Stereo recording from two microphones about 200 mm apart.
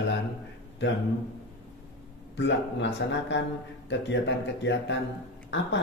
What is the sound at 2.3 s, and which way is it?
Speech, 60° left (ahead or behind).